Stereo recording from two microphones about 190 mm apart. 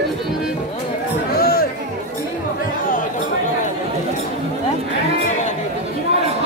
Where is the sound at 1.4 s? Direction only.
50° left (ahead or behind).